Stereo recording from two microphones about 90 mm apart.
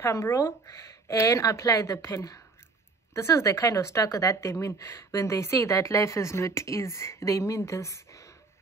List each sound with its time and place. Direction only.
0.0 s speech: 30° left (ahead or behind)